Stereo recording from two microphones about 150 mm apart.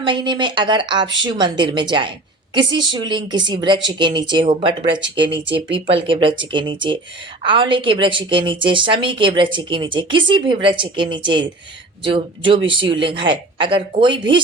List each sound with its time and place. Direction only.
0.0 s a woman's voice: 30° right (ahead or behind)